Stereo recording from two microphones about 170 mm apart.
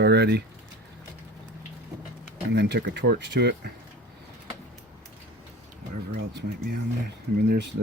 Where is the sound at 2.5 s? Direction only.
85° right.